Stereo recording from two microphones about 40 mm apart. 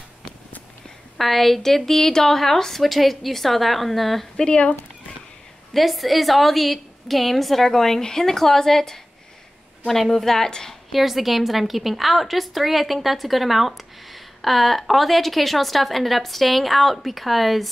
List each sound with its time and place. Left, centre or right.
1.1 s a woman's voice: centre
4.5 s speech: left
5.7 s a woman's voice: centre
10.9 s a woman's voice: centre